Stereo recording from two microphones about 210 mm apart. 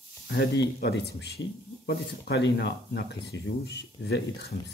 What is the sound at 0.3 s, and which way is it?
Speech, 50° left (ahead or behind).